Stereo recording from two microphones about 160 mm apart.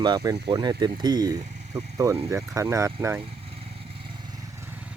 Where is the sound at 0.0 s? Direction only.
25° right (ahead or behind).